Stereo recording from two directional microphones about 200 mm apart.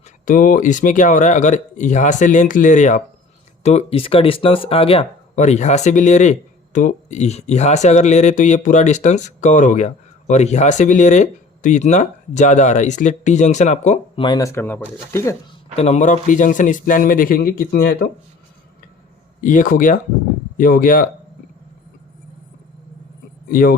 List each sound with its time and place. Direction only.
0.3 s speech: 45° left (ahead or behind)
14.3 s speech: 15° left (ahead or behind)
15.7 s speech: 35° left (ahead or behind); by 18.1 s 50° left (ahead or behind)
19.4 s speech: 40° left (ahead or behind)
23.5 s speech: 45° left (ahead or behind)